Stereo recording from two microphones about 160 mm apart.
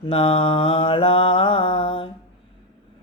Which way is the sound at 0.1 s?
40° left (ahead or behind).